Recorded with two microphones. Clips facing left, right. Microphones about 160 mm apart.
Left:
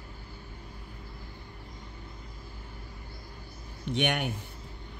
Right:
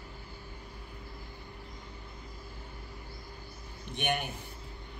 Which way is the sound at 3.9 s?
70° left (ahead or behind).